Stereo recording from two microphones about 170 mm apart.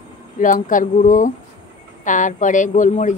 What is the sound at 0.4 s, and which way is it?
Speech, 50° left (ahead or behind).